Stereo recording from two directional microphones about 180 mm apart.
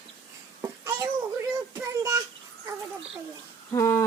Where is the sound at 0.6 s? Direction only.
15° right (ahead or behind).